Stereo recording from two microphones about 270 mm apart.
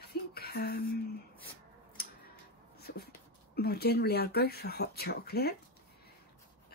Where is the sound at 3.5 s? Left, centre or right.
Left.